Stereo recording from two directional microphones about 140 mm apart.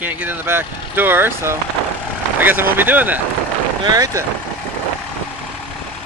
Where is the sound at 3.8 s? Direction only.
25° right (ahead or behind).